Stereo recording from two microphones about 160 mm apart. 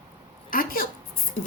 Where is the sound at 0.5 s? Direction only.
60° left (ahead or behind).